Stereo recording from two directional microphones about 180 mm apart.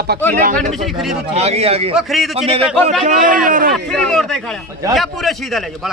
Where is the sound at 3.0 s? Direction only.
50° right (ahead or behind).